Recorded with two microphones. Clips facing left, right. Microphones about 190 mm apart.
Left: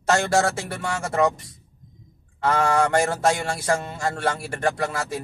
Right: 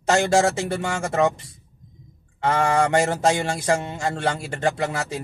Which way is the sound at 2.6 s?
20° right (ahead or behind).